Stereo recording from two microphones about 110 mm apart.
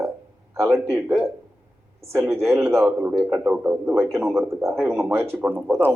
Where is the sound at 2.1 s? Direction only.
20° right (ahead or behind).